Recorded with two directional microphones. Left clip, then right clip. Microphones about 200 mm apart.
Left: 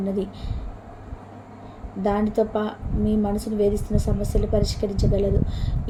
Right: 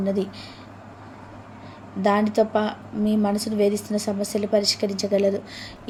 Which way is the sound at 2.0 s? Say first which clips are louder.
Right 2 dB; 20° right (ahead or behind).